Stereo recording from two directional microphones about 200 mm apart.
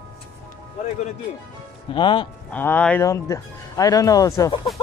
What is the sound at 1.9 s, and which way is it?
Speech, 25° left (ahead or behind).